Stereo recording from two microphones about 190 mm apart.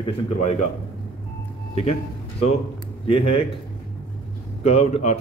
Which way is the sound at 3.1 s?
30° left (ahead or behind).